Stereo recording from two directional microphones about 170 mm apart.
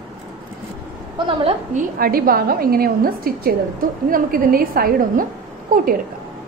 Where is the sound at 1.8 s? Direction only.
60° right (ahead or behind).